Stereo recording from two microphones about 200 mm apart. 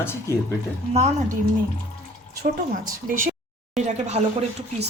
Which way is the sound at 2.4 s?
45° right (ahead or behind).